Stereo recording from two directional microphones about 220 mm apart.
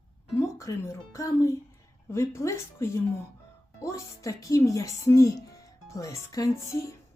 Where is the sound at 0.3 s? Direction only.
10° left (ahead or behind).